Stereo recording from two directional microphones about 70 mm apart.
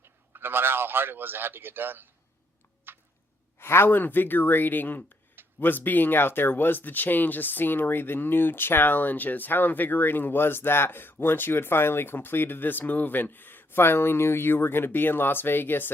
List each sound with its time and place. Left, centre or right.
0.3 s a man's voice: right
2.9 s a sound: right
3.6 s speech: left